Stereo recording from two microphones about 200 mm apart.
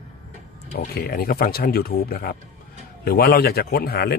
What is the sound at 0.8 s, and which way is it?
A man's voice, 50° left (ahead or behind).